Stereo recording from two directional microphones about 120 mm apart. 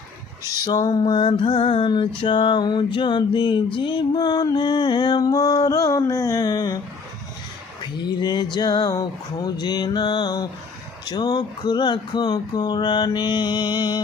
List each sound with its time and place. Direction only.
0.6 s music: 30° left (ahead or behind)
1.3 s mantra: 45° left (ahead or behind)
3.8 s music: 40° left (ahead or behind)
7.8 s music: 40° left (ahead or behind)